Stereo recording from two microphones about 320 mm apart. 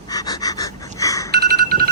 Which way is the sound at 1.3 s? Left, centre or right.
Right.